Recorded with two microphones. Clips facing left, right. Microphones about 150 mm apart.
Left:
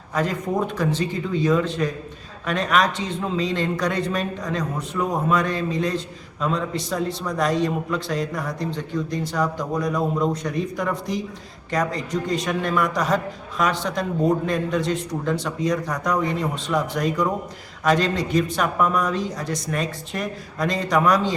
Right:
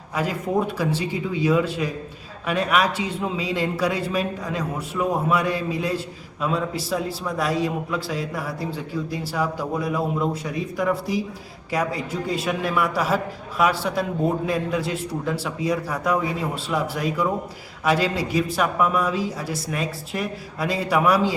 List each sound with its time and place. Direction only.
0.1 s a man's voice: 5° right (ahead or behind)